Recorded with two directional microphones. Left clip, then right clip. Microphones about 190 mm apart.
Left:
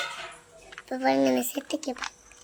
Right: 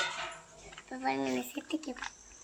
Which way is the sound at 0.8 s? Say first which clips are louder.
Left 10 dB; 70° left (ahead or behind).